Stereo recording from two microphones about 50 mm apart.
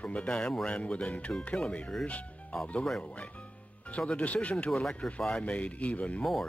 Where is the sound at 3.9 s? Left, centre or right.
Left.